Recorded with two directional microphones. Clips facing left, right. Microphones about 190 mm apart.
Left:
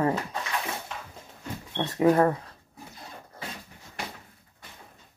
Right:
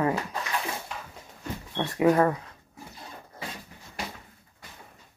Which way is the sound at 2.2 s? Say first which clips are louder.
Left 1 dB; 35° left (ahead or behind).